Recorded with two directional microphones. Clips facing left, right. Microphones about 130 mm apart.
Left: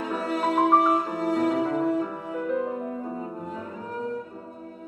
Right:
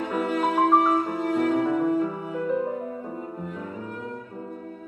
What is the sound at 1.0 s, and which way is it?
Music, centre (ahead or behind).